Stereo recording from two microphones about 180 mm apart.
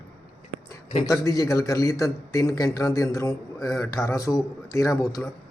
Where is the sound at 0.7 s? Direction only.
20° left (ahead or behind).